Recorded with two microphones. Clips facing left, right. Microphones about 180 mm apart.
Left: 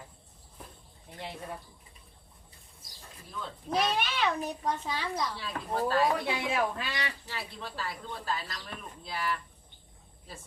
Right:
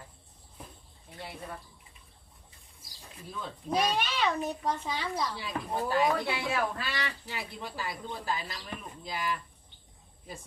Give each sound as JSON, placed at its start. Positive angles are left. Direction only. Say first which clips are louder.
{"t": 1.2, "sound": "speech", "louder": "left 2 dB", "side_deg": 20}
{"t": 3.7, "sound": "a child's voice", "louder": "even", "side_deg": 0}
{"t": 5.4, "sound": "speech", "louder": "left 1 dB", "side_deg": -15}
{"t": 6.2, "sound": "speech", "louder": "left 1 dB", "side_deg": 20}
{"t": 7.3, "sound": "speech", "louder": "right 1 dB", "side_deg": -15}